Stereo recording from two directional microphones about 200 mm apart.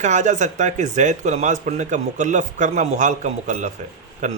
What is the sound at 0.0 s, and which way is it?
Speech, 35° right (ahead or behind).